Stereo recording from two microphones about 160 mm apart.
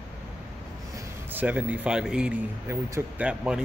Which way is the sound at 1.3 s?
10° right (ahead or behind).